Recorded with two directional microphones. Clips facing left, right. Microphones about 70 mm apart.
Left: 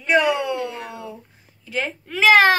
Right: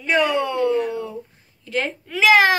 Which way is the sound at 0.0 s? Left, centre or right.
Centre.